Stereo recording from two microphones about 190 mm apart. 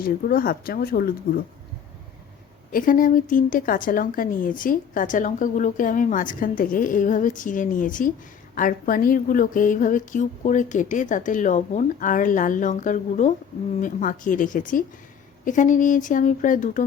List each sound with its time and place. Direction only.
0.0 s a woman's voice: 50° left (ahead or behind)
2.7 s a woman's voice: 45° left (ahead or behind)